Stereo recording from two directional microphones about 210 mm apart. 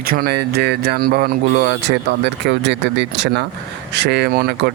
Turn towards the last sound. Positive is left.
turn(degrees=-50)  # may be behind; listen again after turning